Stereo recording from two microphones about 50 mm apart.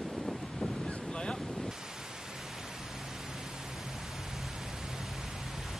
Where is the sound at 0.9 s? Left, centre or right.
Centre.